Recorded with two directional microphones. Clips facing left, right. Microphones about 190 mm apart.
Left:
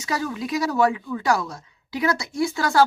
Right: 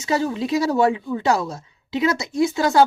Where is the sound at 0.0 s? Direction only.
25° right (ahead or behind).